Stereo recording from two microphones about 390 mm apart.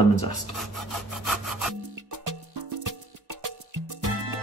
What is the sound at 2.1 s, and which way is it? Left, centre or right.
Music, right.